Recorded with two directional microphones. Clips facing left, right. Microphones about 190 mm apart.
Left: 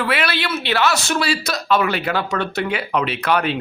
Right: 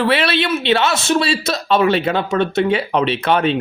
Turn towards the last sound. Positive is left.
turn(degrees=-25)  # may be behind; listen again after turning